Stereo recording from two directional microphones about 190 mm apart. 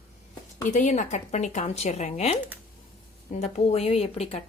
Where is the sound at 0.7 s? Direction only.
40° left (ahead or behind).